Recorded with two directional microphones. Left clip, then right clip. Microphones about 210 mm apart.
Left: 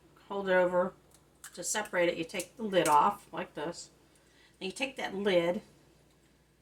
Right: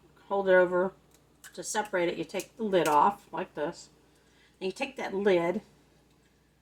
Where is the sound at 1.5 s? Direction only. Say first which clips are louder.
Right 1 dB; 20° left (ahead or behind).